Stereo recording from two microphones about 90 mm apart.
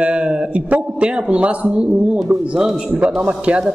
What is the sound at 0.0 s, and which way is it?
A man's voice, 15° right (ahead or behind).